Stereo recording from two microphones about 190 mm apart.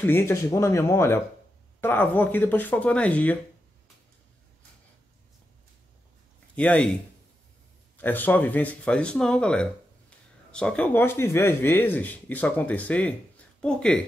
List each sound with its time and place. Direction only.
0.0 s speech: 10° left (ahead or behind)
6.5 s speech: 5° left (ahead or behind)
8.0 s speech: 10° left (ahead or behind)